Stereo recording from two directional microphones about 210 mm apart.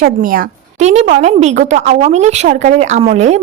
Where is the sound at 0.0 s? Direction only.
40° right (ahead or behind).